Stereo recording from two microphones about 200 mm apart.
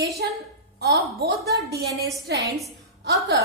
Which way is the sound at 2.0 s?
55° right (ahead or behind).